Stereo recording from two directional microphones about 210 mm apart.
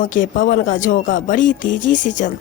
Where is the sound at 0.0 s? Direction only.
40° left (ahead or behind).